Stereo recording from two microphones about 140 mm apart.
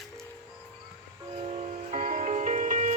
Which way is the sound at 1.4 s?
50° right (ahead or behind).